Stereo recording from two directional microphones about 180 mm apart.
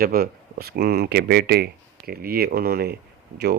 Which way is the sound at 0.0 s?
55° right (ahead or behind).